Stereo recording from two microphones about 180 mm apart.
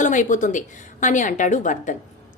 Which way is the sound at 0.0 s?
45° left (ahead or behind).